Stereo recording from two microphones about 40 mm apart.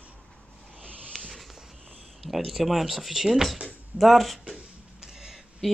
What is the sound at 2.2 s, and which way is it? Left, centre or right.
Speech, centre.